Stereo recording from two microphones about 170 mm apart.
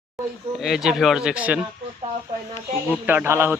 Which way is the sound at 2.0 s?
35° right (ahead or behind).